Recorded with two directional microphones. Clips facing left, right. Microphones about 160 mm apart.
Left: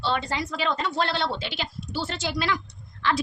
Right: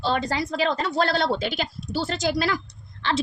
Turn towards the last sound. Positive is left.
turn(degrees=-35)  # may be behind; listen again after turning